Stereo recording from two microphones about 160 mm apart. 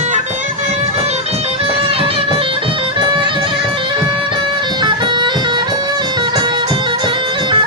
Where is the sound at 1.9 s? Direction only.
35° right (ahead or behind).